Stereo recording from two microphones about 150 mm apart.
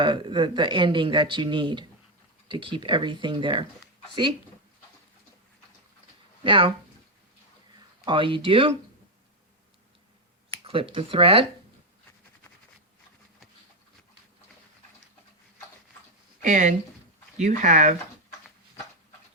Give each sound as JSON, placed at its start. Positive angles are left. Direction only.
{"t": 0.0, "sound": "speech", "side_deg": -30}
{"t": 6.4, "sound": "speech", "side_deg": -35}
{"t": 8.0, "sound": "speech", "side_deg": -35}
{"t": 10.7, "sound": "speech", "side_deg": -35}
{"t": 16.4, "sound": "speech", "side_deg": -55}